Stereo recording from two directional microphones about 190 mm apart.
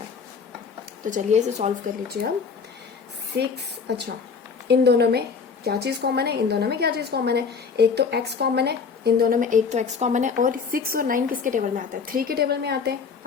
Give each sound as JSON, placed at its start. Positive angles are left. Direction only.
{"t": 1.0, "sound": "speech", "side_deg": -40}
{"t": 3.3, "sound": "a woman's voice", "side_deg": -60}
{"t": 12.1, "sound": "a woman's voice", "side_deg": -55}